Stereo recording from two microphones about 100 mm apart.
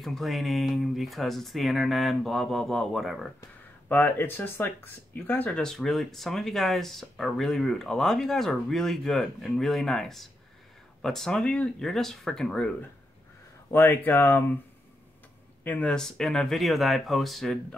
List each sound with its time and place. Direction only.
0.0 s speech: centre (ahead or behind)
3.9 s speech: 20° left (ahead or behind)
13.7 s speech: 20° left (ahead or behind)
15.6 s speech: 15° left (ahead or behind)